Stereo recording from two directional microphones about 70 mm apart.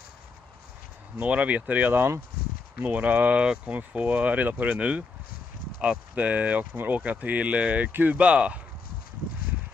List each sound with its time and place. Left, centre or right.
1.1 s speech: right